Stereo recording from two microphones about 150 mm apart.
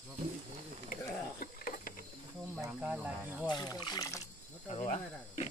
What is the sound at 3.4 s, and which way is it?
Speech, 30° left (ahead or behind).